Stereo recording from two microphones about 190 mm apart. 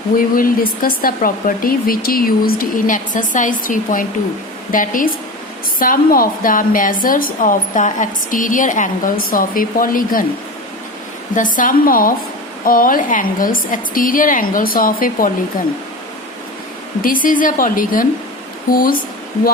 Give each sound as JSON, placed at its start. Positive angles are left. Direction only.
{"t": 0.2, "sound": "a woman's voice", "side_deg": 50}
{"t": 11.3, "sound": "a woman's voice", "side_deg": 45}
{"t": 17.0, "sound": "a woman's voice", "side_deg": 45}